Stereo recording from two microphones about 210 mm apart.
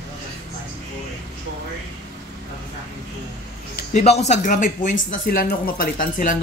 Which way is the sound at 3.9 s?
30° left (ahead or behind).